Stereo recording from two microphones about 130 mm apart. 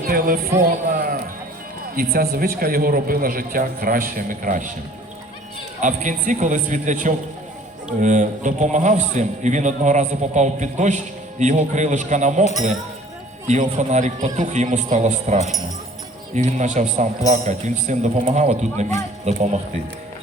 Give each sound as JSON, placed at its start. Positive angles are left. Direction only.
{"t": 0.9, "sound": "run", "side_deg": -90}
{"t": 2.0, "sound": "a man's voice", "side_deg": -90}
{"t": 5.8, "sound": "a man's voice", "side_deg": -80}
{"t": 13.5, "sound": "a man's voice", "side_deg": -65}